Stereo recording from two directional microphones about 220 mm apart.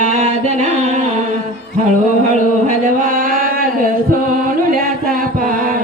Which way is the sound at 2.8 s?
40° right (ahead or behind).